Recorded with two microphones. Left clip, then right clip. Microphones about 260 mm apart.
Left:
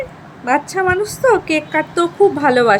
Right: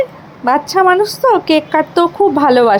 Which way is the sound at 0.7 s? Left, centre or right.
Centre.